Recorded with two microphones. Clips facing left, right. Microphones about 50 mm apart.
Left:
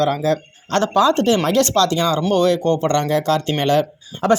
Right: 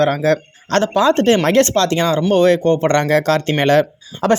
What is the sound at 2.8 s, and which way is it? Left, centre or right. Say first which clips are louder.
Speech: right 3 dB; right.